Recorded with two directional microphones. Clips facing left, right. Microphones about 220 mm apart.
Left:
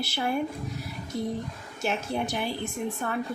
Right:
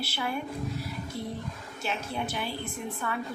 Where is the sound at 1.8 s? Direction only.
45° left (ahead or behind).